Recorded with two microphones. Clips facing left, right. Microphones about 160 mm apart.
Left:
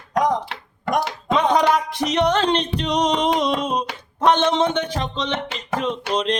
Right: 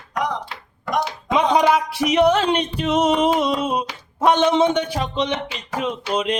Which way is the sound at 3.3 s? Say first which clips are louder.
Right 1 dB; 5° right (ahead or behind).